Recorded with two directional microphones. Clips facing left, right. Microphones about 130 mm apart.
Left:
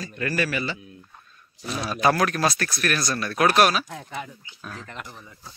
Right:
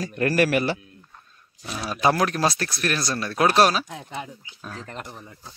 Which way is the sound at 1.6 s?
Centre (ahead or behind).